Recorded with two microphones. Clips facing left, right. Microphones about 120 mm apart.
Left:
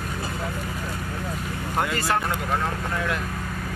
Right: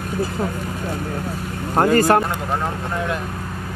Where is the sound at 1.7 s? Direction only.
45° right (ahead or behind).